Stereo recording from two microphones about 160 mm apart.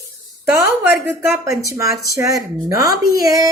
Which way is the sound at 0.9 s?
10° right (ahead or behind).